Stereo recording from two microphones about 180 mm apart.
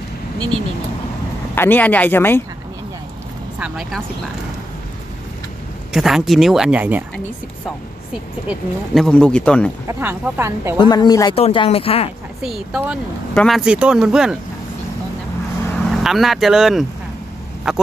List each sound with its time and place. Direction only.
1.5 s speech: 10° left (ahead or behind)
3.5 s speech: 5° right (ahead or behind)
5.9 s speech: centre (ahead or behind)
8.5 s speech: centre (ahead or behind)
9.8 s a woman's voice: 10° right (ahead or behind)
10.8 s speech: 25° left (ahead or behind)
12.4 s speech: 5° right (ahead or behind)
15.9 s speech: centre (ahead or behind)